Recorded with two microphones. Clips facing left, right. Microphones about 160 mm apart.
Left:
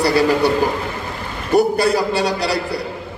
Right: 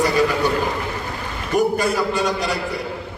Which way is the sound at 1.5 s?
35° left (ahead or behind).